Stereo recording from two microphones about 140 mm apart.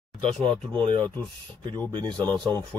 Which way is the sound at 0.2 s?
40° right (ahead or behind).